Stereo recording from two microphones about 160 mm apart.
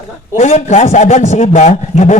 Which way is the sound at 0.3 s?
50° left (ahead or behind).